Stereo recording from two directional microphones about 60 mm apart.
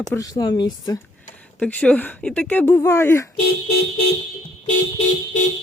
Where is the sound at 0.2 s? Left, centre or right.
Left.